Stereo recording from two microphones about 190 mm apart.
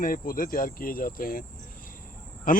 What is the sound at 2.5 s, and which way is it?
Speech, 45° left (ahead or behind).